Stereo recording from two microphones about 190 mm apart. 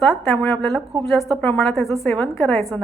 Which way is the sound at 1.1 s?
Centre (ahead or behind).